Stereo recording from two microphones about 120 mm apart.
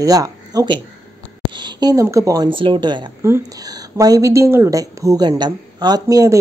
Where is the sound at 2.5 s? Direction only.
45° right (ahead or behind).